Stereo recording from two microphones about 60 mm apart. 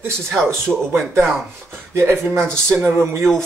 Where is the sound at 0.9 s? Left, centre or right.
Right.